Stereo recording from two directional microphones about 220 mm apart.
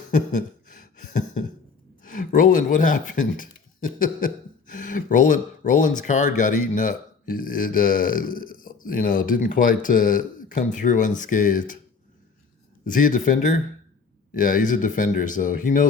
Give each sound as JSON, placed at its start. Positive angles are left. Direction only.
{"t": 0.1, "sound": "a sound", "side_deg": 35}
{"t": 2.0, "sound": "speech", "side_deg": 35}
{"t": 12.8, "sound": "speech", "side_deg": 35}